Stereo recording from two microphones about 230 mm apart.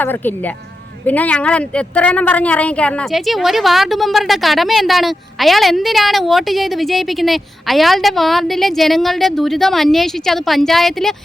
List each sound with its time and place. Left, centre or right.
0.0 s a woman's voice: centre